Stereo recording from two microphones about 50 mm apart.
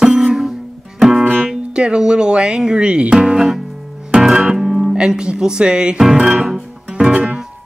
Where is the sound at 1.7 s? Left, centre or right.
Centre.